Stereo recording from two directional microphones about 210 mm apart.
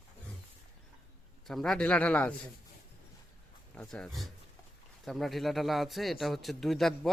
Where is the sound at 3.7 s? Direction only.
5° left (ahead or behind).